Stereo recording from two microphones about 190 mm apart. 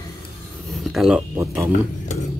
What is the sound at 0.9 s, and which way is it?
Speech, 5° right (ahead or behind).